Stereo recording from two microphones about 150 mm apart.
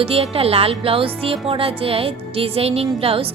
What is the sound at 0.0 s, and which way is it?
Speech, 40° right (ahead or behind).